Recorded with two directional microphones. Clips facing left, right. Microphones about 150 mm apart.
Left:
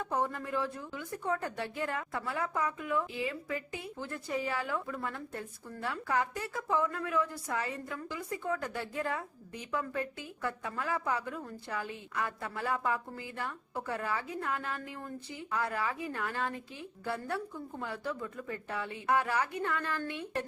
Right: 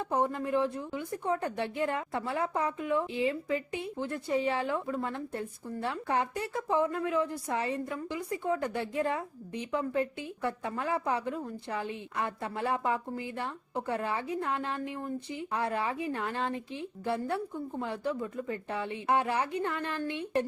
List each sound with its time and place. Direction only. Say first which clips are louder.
0.0 s a woman's voice: right 4 dB; 20° right (ahead or behind)